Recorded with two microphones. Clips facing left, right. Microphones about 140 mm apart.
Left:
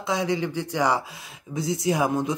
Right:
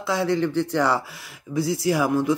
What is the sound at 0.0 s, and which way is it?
Speech, 15° left (ahead or behind).